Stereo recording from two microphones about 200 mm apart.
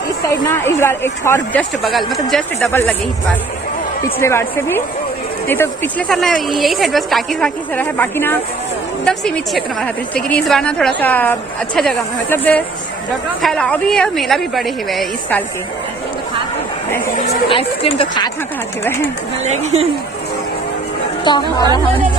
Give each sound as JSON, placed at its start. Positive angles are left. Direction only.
{"t": 0.5, "sound": "speech", "side_deg": 10}
{"t": 1.8, "sound": "a woman's voice", "side_deg": 0}
{"t": 17.5, "sound": "a woman's voice", "side_deg": 30}
{"t": 18.9, "sound": "speech", "side_deg": 10}
{"t": 21.3, "sound": "a woman's voice", "side_deg": 20}